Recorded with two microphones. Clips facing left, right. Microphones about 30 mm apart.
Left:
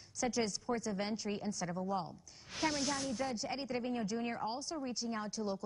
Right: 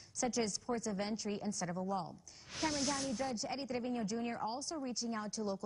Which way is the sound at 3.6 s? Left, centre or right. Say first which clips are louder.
Left 1 dB; left.